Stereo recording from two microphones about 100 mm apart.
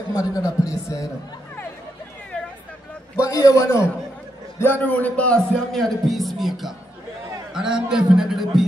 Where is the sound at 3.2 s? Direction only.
35° left (ahead or behind); by 5.4 s 15° left (ahead or behind).